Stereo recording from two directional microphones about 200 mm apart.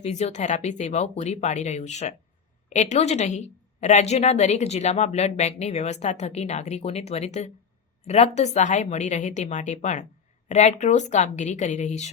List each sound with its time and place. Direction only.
0.0 s a woman's voice: 35° left (ahead or behind)